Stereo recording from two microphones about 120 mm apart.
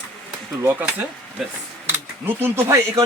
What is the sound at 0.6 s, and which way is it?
Speech, 20° right (ahead or behind).